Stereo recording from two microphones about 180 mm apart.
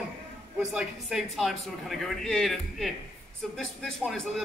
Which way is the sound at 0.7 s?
5° right (ahead or behind).